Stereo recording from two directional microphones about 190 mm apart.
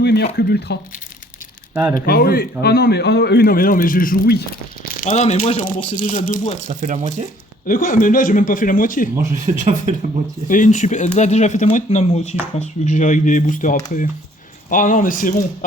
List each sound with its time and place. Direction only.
0.0 s a sound: 60° left (ahead or behind)
0.3 s speech: 60° left (ahead or behind)
1.7 s speech: 10° right (ahead or behind)
2.0 s speech: 50° left (ahead or behind)
6.7 s speech: 40° right (ahead or behind)
7.7 s speech: 45° left (ahead or behind)
9.1 s speech: 40° right (ahead or behind)
10.5 s speech: 40° left (ahead or behind)